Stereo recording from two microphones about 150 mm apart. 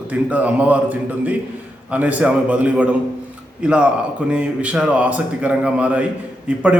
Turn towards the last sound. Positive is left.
turn(degrees=-10)  # may be behind; listen again after turning